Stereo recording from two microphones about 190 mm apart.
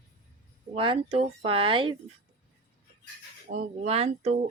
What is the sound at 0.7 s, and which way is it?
Speech, 30° right (ahead or behind).